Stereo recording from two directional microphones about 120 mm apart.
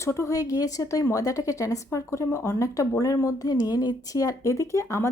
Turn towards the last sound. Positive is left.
turn(degrees=25)  # may be behind; listen again after turning